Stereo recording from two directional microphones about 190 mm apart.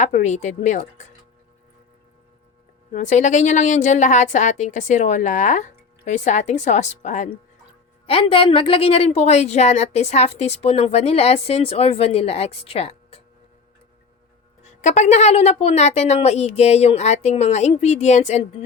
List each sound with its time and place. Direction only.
0.0 s a woman's voice: 40° left (ahead or behind)
2.9 s a woman's voice: 40° left (ahead or behind)
14.6 s a woman's voice: 35° left (ahead or behind)